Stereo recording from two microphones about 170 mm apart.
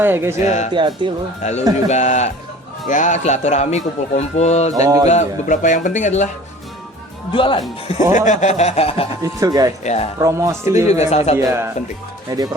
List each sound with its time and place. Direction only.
0.0 s speech: 15° right (ahead or behind)
0.4 s speech: 45° left (ahead or behind)
0.7 s speech: 30° right (ahead or behind)
1.4 s a man's voice: 40° left (ahead or behind)
4.7 s speech: 20° right (ahead or behind)
5.0 s speech: 45° left (ahead or behind)
7.3 s a man's voice: 30° left (ahead or behind)
8.1 s a man's voice: 45° left (ahead or behind)
9.2 s speech: 20° right (ahead or behind)
9.8 s a man's voice: 40° left (ahead or behind)
10.2 s speech: 15° right (ahead or behind)
10.8 s a man's voice: 40° left (ahead or behind)
11.3 s speech: 15° right (ahead or behind)